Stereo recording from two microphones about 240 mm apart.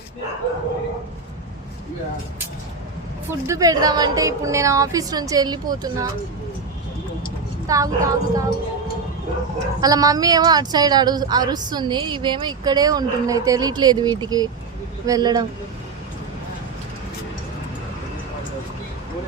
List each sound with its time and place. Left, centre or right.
3.2 s a woman's voice: centre
7.7 s a woman's voice: centre
9.8 s a woman's voice: centre